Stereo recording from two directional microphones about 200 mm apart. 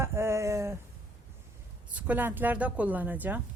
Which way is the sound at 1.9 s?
10° right (ahead or behind).